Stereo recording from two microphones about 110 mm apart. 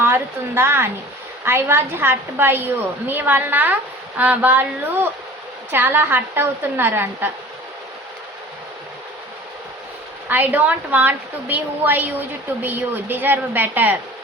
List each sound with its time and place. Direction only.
0.0 s a woman's voice: 20° right (ahead or behind)
10.2 s a woman's voice: 15° right (ahead or behind)